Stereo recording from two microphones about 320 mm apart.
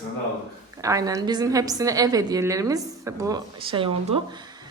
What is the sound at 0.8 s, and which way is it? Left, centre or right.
A woman's voice, centre.